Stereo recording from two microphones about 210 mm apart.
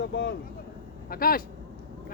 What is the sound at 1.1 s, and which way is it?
Speech, 45° left (ahead or behind).